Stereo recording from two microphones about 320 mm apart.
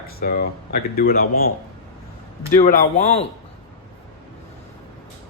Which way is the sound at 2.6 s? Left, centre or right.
Left.